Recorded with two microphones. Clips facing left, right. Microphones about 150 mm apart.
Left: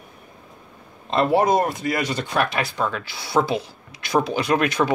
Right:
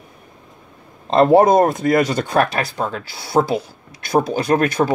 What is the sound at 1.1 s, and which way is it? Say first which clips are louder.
Speech: right 7 dB; 45° right (ahead or behind).